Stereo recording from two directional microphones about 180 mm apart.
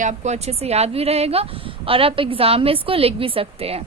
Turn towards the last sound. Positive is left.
turn(degrees=-35)  # may be behind; listen again after turning